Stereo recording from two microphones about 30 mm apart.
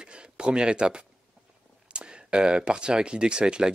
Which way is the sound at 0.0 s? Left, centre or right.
Right.